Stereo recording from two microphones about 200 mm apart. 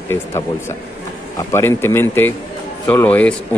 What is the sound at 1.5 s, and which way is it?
A man's voice, 10° left (ahead or behind).